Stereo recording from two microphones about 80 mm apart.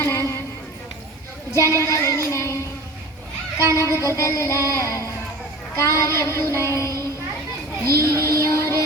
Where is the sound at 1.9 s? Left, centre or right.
Left.